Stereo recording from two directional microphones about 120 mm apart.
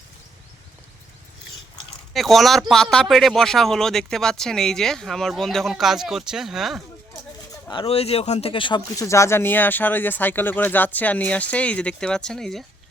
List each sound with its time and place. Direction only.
2.1 s speech: centre (ahead or behind)
7.7 s speech: 50° left (ahead or behind)
9.0 s speech: 25° left (ahead or behind); by 12.6 s 5° left (ahead or behind)